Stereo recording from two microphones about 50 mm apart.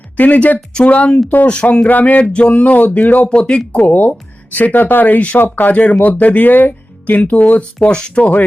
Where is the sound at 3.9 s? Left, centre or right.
Left.